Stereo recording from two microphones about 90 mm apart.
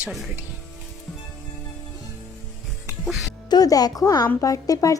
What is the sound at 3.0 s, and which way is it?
Speech, centre (ahead or behind).